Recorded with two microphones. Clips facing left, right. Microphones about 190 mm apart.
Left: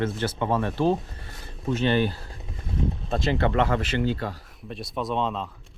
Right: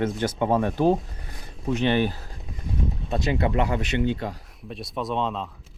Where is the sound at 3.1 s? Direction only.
5° right (ahead or behind).